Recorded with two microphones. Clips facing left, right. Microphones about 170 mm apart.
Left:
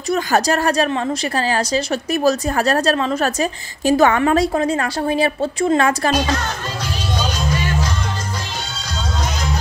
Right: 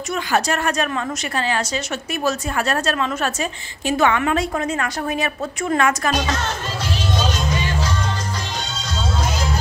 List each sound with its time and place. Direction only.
0.1 s a woman's voice: 35° left (ahead or behind)